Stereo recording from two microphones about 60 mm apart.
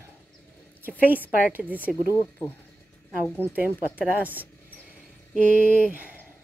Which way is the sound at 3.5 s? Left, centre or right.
Right.